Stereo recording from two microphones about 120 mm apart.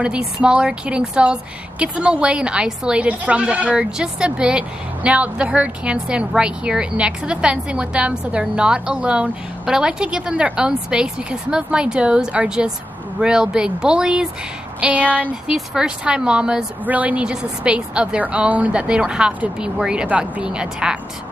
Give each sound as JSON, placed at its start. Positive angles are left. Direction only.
{"t": 0.0, "sound": "a woman's voice", "side_deg": -10}